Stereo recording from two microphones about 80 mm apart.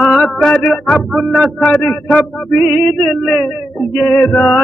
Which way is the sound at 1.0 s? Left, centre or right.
Centre.